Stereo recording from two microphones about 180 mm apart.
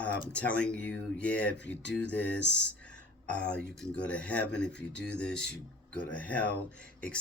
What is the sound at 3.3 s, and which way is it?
Speech, 5° left (ahead or behind).